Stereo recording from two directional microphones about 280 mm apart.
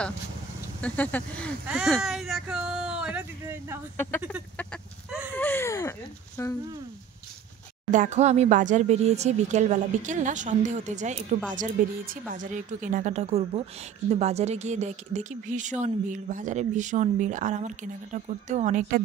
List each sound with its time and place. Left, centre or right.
0.7 s speech: centre
3.9 s speech: centre
5.4 s speech: centre
7.9 s speech: right